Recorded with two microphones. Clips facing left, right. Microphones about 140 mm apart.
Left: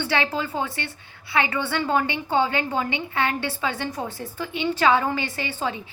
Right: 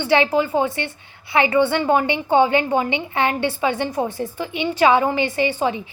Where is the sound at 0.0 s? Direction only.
20° right (ahead or behind).